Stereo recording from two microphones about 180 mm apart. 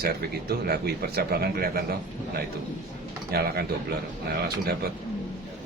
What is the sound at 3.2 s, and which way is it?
Speech, 60° right (ahead or behind).